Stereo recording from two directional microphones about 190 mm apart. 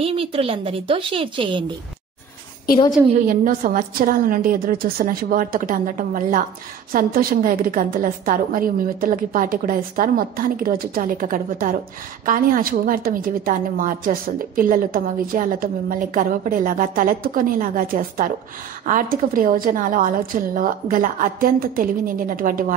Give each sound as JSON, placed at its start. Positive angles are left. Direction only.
{"t": 0.0, "sound": "a woman's voice", "side_deg": -30}
{"t": 3.3, "sound": "a woman's voice", "side_deg": -45}